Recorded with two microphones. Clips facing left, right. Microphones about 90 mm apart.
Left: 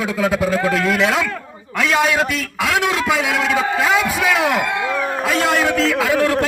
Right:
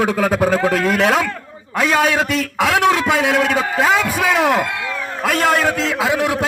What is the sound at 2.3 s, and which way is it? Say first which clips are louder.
A man's voice: right 3 dB; 45° right (ahead or behind).